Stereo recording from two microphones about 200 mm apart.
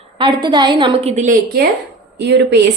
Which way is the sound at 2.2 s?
60° right (ahead or behind).